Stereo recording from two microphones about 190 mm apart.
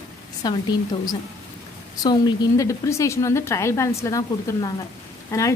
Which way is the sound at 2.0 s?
20° left (ahead or behind).